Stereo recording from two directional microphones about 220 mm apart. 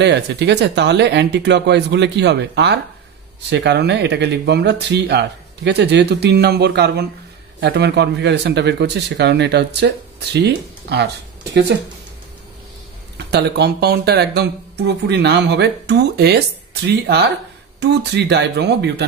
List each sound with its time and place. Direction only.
0.0 s speech: 50° right (ahead or behind)
13.2 s speech: 50° right (ahead or behind)